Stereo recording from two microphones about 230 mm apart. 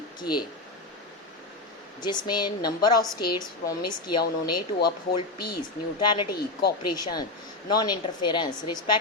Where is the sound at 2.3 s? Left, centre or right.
Centre.